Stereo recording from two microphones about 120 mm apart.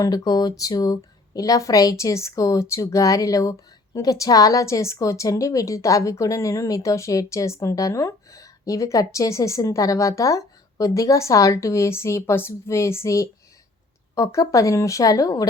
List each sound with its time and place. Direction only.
0.0 s a woman's voice: 35° left (ahead or behind)